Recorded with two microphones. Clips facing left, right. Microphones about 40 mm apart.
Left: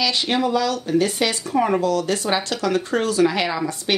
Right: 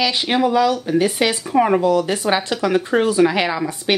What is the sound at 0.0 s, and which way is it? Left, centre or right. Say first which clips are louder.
Speech: right 3 dB; centre.